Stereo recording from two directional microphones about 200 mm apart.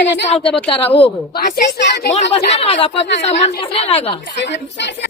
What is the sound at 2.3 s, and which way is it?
Speech, 30° left (ahead or behind).